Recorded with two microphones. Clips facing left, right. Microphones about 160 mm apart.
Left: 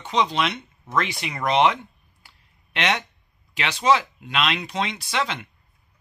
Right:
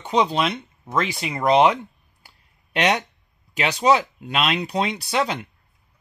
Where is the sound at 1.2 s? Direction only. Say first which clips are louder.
Right 4 dB; 30° right (ahead or behind).